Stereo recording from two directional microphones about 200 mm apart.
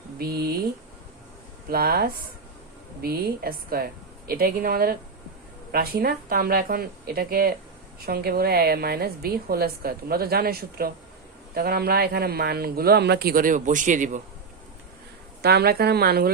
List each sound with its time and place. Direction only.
0.2 s a woman's voice: 50° right (ahead or behind)
1.7 s a woman's voice: 50° right (ahead or behind)
15.4 s a woman's voice: 55° right (ahead or behind)